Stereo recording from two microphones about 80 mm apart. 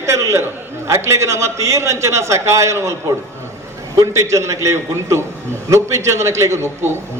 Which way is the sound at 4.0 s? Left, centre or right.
Right.